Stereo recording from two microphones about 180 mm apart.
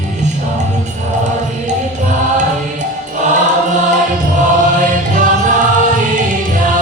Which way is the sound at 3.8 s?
45° right (ahead or behind).